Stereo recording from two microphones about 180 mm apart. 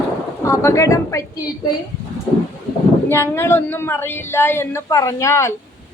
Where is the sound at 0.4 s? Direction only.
15° left (ahead or behind).